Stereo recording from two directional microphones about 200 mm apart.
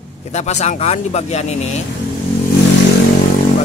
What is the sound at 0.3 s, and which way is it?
Speech, 35° left (ahead or behind).